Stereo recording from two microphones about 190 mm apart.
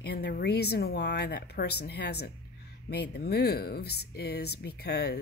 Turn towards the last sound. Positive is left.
turn(degrees=60)  # may be behind; listen again after turning